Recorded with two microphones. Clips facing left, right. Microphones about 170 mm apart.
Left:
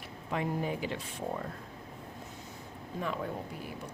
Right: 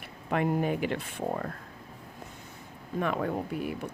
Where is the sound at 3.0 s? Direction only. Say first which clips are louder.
Right 6 dB; 65° right (ahead or behind).